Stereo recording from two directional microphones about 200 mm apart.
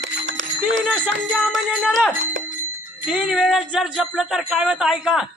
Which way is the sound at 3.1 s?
5° right (ahead or behind).